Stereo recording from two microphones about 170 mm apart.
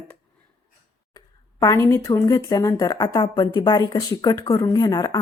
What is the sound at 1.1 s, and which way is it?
Speech, 20° left (ahead or behind).